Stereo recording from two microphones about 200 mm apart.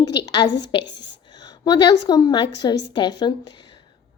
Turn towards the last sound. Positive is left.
turn(degrees=20)  # may be behind; listen again after turning